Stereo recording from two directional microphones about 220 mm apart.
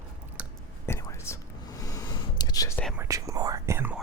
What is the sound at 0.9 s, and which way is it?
Whispering, 15° left (ahead or behind).